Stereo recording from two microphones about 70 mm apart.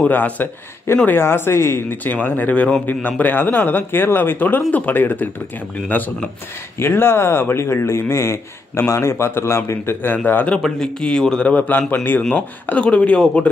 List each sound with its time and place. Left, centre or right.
0.1 s speech: left
2.0 s speech: left
10.1 s speech: left
10.6 s speech: centre
11.5 s speech: left
12.2 s speech: centre